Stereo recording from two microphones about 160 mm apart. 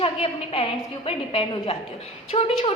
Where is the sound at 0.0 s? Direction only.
35° left (ahead or behind).